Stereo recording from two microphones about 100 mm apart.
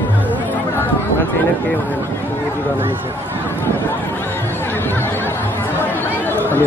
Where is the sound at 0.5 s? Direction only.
20° left (ahead or behind).